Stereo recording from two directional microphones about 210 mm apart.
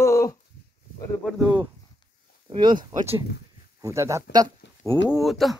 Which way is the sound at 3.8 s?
15° right (ahead or behind).